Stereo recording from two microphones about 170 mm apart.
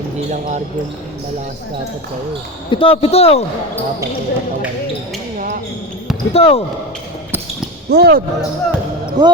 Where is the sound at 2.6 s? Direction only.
30° left (ahead or behind).